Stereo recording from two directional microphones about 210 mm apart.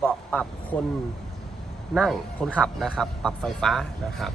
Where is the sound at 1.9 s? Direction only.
Centre (ahead or behind).